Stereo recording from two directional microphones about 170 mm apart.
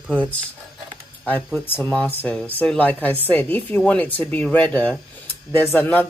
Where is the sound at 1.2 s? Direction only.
10° left (ahead or behind).